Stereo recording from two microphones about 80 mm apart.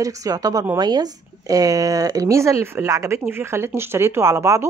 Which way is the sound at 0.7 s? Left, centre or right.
Right.